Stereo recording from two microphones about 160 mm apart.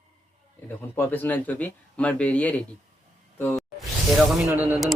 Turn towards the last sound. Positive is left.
turn(degrees=-10)  # may be behind; listen again after turning